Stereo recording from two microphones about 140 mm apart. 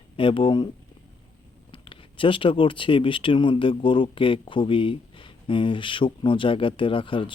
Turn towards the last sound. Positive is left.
turn(degrees=35)  # may be behind; listen again after turning